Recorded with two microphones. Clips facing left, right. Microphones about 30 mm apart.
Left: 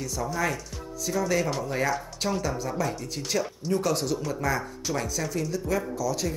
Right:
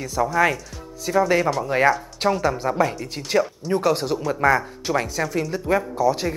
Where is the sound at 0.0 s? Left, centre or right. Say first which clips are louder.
Right 9 dB; right.